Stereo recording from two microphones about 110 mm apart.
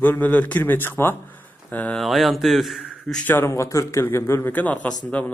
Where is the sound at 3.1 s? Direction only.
20° left (ahead or behind).